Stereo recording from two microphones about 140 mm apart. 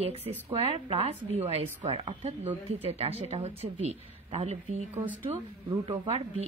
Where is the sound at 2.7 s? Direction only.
45° right (ahead or behind).